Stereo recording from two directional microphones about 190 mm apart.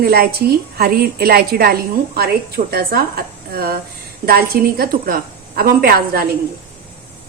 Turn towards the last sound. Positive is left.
turn(degrees=-50)  # may be behind; listen again after turning